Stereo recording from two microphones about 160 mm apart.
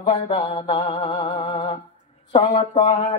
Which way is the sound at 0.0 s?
30° left (ahead or behind).